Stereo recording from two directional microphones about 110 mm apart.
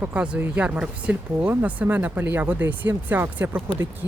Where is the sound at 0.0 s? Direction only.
10° right (ahead or behind).